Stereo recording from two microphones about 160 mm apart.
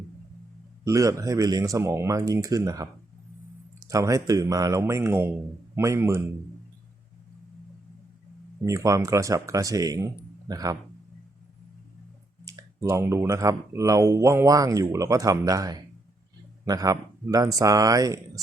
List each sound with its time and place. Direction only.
0.9 s a man's voice: 20° right (ahead or behind)
8.6 s speech: 20° right (ahead or behind)
12.5 s speech: 20° right (ahead or behind)